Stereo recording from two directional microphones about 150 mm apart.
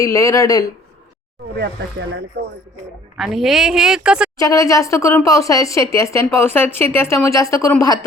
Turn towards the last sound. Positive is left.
turn(degrees=20)  # may be behind; listen again after turning